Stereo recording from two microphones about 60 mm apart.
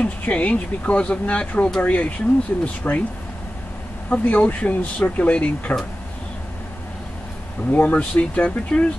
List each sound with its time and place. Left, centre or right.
0.0 s speech: left
4.1 s speech: left
7.7 s speech: left